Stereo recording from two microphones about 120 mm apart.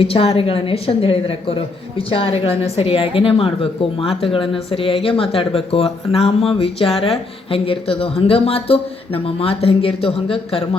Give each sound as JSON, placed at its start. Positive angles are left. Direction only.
{"t": 0.0, "sound": "a woman's voice", "side_deg": 55}